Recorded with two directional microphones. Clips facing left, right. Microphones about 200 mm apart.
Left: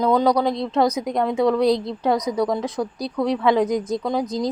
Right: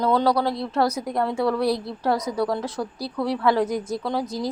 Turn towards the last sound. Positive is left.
turn(degrees=15)  # may be behind; listen again after turning